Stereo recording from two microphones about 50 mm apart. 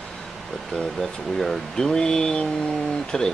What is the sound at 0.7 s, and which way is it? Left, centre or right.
Speech, centre.